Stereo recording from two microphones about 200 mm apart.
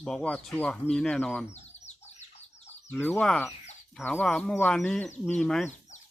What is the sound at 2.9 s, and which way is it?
Speech, 5° left (ahead or behind).